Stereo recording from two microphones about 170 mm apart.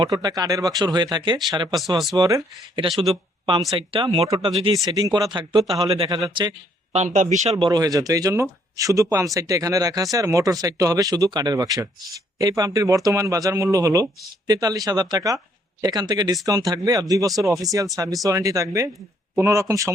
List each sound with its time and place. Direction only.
0.0 s speech: 25° right (ahead or behind)
4.9 s speech: 20° right (ahead or behind)
6.9 s speech: 40° right (ahead or behind)
7.5 s speech: 25° right (ahead or behind)